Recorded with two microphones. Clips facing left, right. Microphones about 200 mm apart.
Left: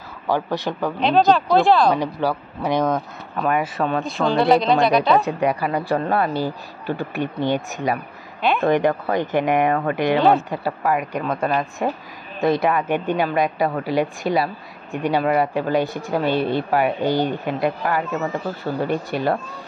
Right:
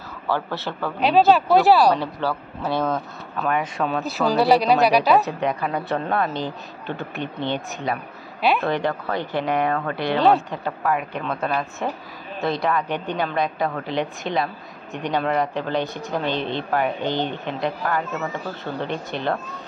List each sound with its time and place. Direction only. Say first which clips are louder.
0.3 s speech: left 4 dB; 15° left (ahead or behind)
0.9 s speech: right 1 dB; 5° right (ahead or behind)
2.0 s speech: left 3 dB; 15° left (ahead or behind)
3.4 s speech: left 2 dB; 5° left (ahead or behind)
5.2 s speech: left 3 dB; 10° left (ahead or behind)
8.4 s speech: even; 5° right (ahead or behind)
8.6 s speech: left 5 dB; 15° left (ahead or behind)
10.1 s speech: right 1 dB; centre (ahead or behind)
12.8 s a woman's voice: left 5 dB; 50° left (ahead or behind)
13.2 s speech: left 3 dB; 10° left (ahead or behind)